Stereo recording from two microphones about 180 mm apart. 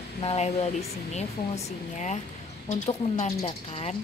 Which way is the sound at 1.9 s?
40° left (ahead or behind).